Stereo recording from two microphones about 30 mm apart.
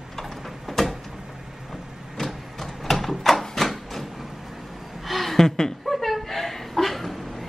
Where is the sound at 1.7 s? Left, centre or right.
Centre.